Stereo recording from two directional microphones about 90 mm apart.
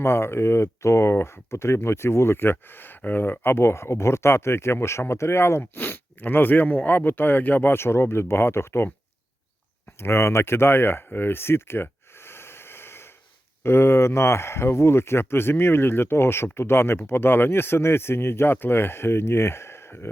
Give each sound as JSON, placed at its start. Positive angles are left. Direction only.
{"t": 0.0, "sound": "speech", "side_deg": 30}
{"t": 10.0, "sound": "speech", "side_deg": 30}